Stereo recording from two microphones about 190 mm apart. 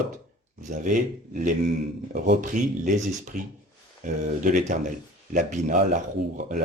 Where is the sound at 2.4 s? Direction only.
45° right (ahead or behind).